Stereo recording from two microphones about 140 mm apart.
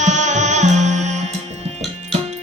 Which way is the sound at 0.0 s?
60° right (ahead or behind).